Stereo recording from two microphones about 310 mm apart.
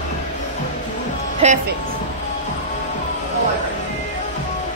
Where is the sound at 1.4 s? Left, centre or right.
Right.